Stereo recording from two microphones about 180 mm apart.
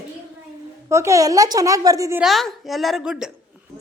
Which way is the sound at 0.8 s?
15° right (ahead or behind).